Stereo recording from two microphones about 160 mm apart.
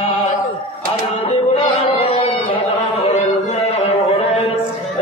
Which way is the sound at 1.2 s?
35° left (ahead or behind).